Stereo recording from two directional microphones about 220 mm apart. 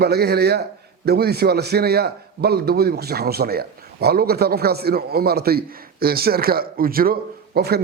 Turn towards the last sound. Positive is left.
turn(degrees=-45)  # may be behind; listen again after turning